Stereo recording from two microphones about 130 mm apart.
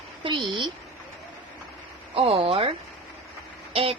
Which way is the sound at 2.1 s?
45° right (ahead or behind).